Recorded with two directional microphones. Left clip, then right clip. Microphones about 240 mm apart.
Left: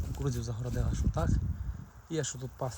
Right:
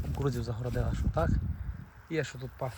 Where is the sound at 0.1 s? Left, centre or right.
Centre.